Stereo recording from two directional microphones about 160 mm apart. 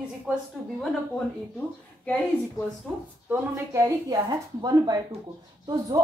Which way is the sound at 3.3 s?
20° right (ahead or behind).